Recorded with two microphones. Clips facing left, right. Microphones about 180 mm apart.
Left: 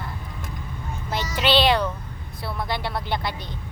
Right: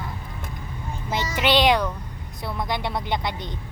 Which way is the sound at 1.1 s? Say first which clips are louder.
Even; 15° right (ahead or behind).